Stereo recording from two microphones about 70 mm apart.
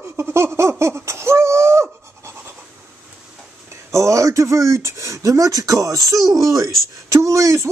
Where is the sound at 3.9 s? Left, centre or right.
Right.